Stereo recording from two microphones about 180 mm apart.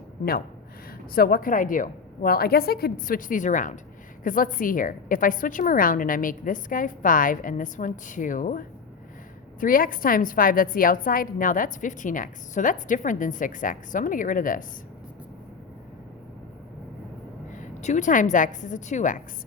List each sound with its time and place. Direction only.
1.1 s a woman's voice: 55° left (ahead or behind)
17.8 s a woman's voice: 45° left (ahead or behind)